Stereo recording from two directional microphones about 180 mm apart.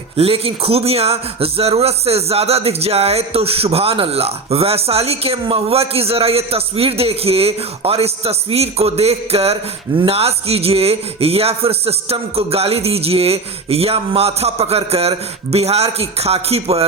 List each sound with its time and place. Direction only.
0.2 s a man's voice: 30° right (ahead or behind)